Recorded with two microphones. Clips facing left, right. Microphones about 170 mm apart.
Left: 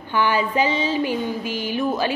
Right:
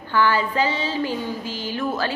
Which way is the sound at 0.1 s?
15° left (ahead or behind).